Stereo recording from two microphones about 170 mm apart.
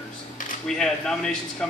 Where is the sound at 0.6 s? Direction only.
5° left (ahead or behind).